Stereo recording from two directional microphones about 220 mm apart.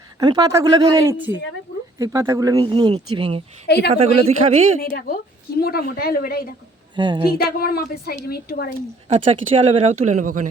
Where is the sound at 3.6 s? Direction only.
50° left (ahead or behind).